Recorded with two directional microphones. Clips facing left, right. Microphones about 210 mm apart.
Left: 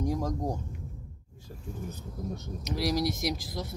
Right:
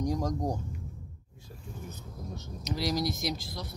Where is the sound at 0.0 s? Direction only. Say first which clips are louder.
Even; 5° left (ahead or behind).